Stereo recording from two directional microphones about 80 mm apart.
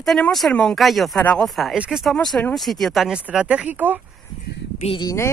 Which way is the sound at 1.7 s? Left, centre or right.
Centre.